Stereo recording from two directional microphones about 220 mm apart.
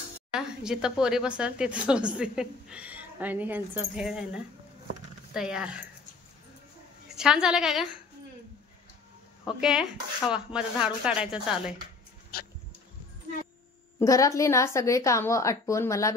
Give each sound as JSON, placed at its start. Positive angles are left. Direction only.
{"t": 0.3, "sound": "speech", "side_deg": -5}
{"t": 5.3, "sound": "speech", "side_deg": -5}
{"t": 7.1, "sound": "a woman's voice", "side_deg": -5}
{"t": 9.6, "sound": "speech", "side_deg": 0}
{"t": 12.3, "sound": "a sound", "side_deg": 45}
{"t": 13.9, "sound": "a woman's voice", "side_deg": 15}